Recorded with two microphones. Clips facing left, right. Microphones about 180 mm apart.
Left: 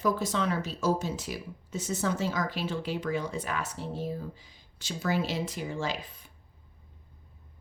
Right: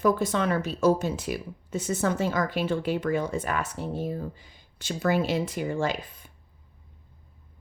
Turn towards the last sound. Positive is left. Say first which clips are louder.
# right 5 dB
turn(degrees=-55)  # may be behind; listen again after turning